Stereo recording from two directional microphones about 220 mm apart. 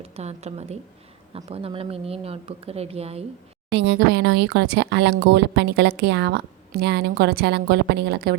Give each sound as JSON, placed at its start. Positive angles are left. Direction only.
{"t": 0.0, "sound": "speech", "side_deg": -30}
{"t": 3.7, "sound": "speech", "side_deg": -50}